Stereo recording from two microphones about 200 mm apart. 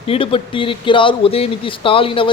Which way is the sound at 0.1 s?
30° left (ahead or behind).